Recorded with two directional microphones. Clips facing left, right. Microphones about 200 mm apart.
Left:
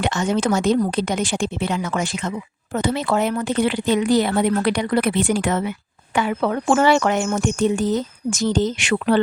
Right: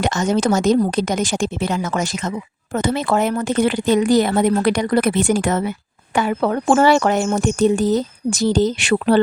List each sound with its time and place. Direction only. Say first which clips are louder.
0.0 s a woman's voice: right 2 dB; 40° right (ahead or behind)